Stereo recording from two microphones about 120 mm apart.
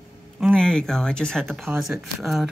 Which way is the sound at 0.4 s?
5° left (ahead or behind).